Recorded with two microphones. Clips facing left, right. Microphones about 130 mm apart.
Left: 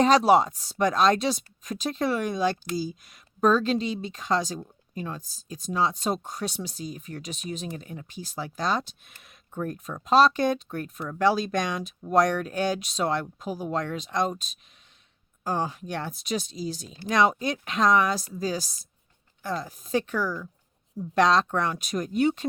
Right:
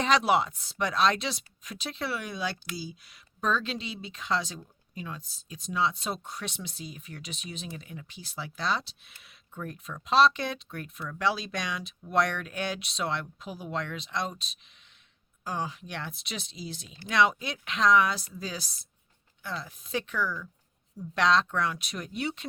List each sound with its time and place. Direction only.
0.0 s speech: 40° left (ahead or behind)